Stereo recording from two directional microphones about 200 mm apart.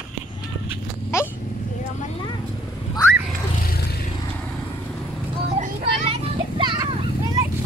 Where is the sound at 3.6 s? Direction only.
50° left (ahead or behind).